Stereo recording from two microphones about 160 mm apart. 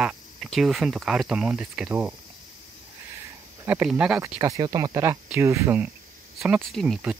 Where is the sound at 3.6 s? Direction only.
10° right (ahead or behind).